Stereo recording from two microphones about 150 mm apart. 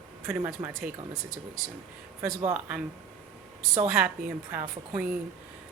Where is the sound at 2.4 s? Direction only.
10° right (ahead or behind).